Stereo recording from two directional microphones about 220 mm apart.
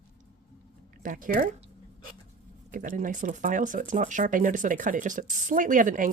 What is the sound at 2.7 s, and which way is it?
Speech, 35° right (ahead or behind).